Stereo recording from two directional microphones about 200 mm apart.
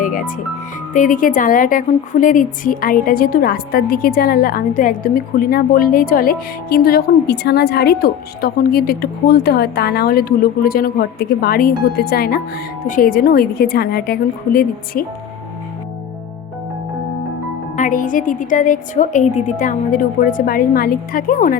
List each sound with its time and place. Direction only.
0.0 s music: 40° left (ahead or behind)
0.9 s a woman's voice: 40° left (ahead or behind)
17.7 s a woman's voice: 40° left (ahead or behind)